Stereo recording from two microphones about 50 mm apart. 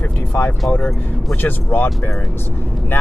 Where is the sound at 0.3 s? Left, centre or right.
Left.